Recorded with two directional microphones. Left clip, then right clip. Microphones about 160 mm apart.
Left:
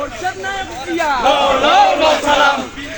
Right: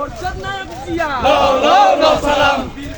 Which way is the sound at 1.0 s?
35° right (ahead or behind).